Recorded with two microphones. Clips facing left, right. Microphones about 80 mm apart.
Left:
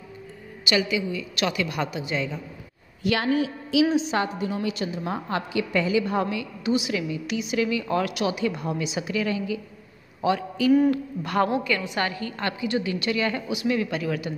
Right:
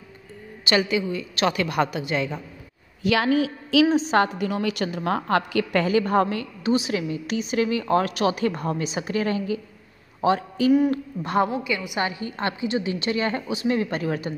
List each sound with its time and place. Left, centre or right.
0.7 s a woman's voice: right
3.3 s a woman's voice: right
3.9 s a woman's voice: right
4.2 s a woman's voice: right
6.6 s a woman's voice: right
11.5 s a woman's voice: centre; by 14.3 s right